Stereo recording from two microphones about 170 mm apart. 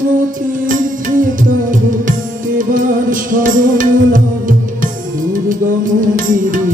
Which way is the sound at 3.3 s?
50° right (ahead or behind).